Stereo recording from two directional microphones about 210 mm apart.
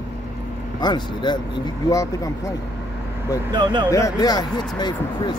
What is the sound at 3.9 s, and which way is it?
Speech, 15° left (ahead or behind).